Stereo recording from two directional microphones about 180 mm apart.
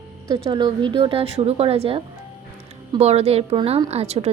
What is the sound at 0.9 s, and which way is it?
A woman's voice, 30° right (ahead or behind).